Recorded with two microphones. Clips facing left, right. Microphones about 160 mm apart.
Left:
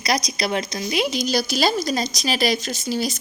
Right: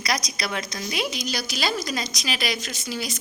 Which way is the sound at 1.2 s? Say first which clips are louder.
Left 8 dB; 35° left (ahead or behind).